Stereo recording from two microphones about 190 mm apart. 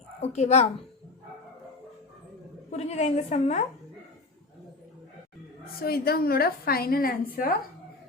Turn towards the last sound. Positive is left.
turn(degrees=50)  # may be behind; listen again after turning